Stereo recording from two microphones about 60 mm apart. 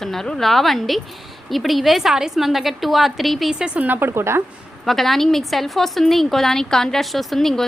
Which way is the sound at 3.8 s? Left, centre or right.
Right.